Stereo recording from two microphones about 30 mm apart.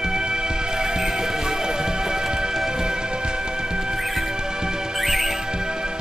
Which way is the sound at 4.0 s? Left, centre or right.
Centre.